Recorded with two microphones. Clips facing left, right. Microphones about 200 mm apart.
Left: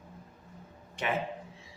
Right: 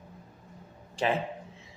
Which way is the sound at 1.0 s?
30° right (ahead or behind).